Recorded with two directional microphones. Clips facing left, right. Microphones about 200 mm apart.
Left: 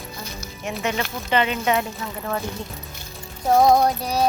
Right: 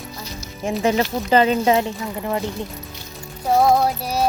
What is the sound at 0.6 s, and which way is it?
Speech, 30° right (ahead or behind).